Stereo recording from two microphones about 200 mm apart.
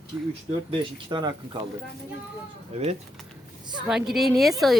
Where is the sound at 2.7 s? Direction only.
30° right (ahead or behind).